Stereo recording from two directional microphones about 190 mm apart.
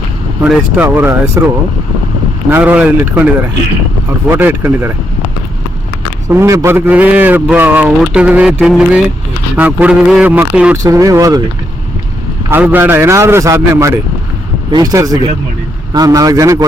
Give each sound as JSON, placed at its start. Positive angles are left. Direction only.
{"t": 0.4, "sound": "a man's voice", "side_deg": -10}
{"t": 2.5, "sound": "a man's voice", "side_deg": -10}
{"t": 6.2, "sound": "a man's voice", "side_deg": -15}
{"t": 10.8, "sound": "a man's voice", "side_deg": -15}
{"t": 12.5, "sound": "a man's voice", "side_deg": -10}